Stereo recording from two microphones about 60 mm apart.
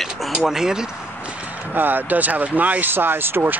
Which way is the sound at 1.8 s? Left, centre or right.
Right.